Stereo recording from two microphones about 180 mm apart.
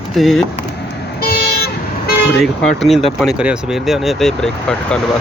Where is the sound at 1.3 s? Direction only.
60° left (ahead or behind).